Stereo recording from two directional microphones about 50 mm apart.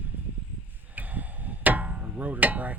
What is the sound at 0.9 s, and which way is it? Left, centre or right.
Music, right.